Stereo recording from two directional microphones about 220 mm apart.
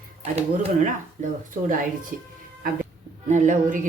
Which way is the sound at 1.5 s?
35° right (ahead or behind).